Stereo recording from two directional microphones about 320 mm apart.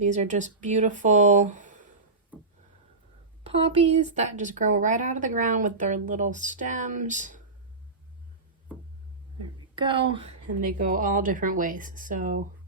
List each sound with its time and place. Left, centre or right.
0.0 s speech: right
3.4 s speech: centre
9.7 s speech: centre